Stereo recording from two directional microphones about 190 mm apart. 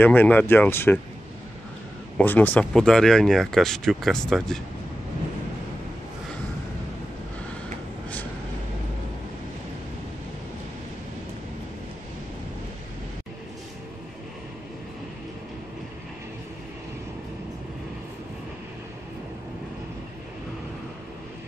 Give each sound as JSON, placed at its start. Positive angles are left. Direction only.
{"t": 0.0, "sound": "speech", "side_deg": 10}
{"t": 2.1, "sound": "speech", "side_deg": 10}